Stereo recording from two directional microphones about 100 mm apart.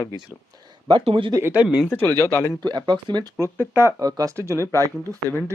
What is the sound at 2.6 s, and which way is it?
Speech, 45° right (ahead or behind).